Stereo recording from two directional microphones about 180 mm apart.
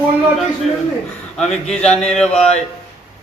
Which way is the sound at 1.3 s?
5° left (ahead or behind).